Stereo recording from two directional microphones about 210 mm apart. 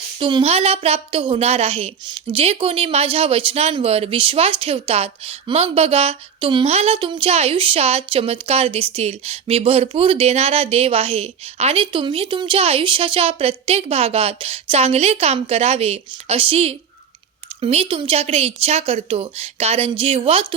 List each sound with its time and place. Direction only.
0.2 s a woman's voice: 25° right (ahead or behind)